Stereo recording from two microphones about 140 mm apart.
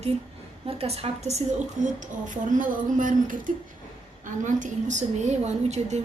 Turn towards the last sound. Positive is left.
turn(degrees=-55)  # may be behind; listen again after turning